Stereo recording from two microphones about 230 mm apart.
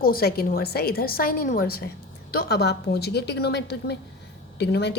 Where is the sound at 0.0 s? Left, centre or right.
Left.